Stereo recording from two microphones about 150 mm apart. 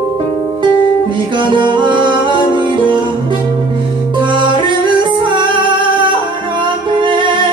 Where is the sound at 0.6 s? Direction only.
30° right (ahead or behind).